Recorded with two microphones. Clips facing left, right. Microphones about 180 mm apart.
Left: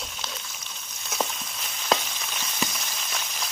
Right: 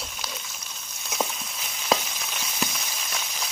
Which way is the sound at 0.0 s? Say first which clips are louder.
Even; 5° right (ahead or behind).